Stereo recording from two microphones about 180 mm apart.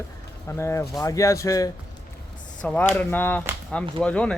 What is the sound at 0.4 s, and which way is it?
Speech, 15° left (ahead or behind).